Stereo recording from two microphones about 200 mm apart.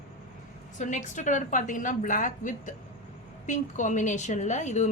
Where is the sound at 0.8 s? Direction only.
40° left (ahead or behind).